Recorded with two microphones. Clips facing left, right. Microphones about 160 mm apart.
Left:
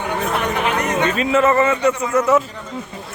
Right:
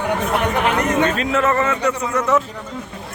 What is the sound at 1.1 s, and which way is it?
Speech, centre (ahead or behind).